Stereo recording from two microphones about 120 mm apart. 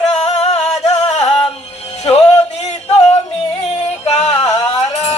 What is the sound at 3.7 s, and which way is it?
Music, 65° left (ahead or behind).